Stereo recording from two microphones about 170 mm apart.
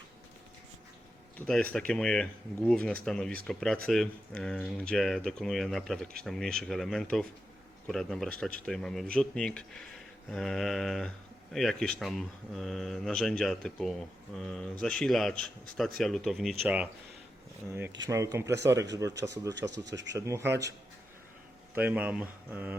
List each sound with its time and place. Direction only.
1.4 s speech: 5° left (ahead or behind); by 18.9 s 15° right (ahead or behind)
19.5 s speech: 90° right
20.1 s speech: 15° right (ahead or behind)
21.8 s speech: 10° right (ahead or behind)